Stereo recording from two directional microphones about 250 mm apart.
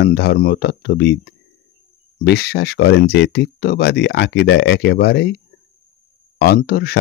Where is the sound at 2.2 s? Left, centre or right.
Left.